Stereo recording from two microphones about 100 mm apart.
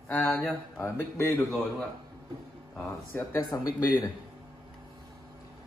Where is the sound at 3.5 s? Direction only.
25° left (ahead or behind).